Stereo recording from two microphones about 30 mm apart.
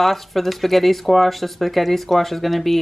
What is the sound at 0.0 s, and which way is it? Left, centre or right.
Speech, centre.